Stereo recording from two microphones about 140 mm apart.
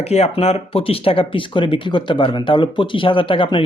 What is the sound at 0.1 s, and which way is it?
Speech, 50° left (ahead or behind).